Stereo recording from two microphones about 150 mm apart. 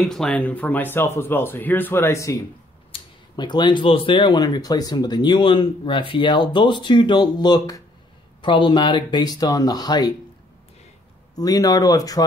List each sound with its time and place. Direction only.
0.0 s speech: 5° left (ahead or behind); by 10.1 s 25° left (ahead or behind)
11.3 s speech: 25° left (ahead or behind)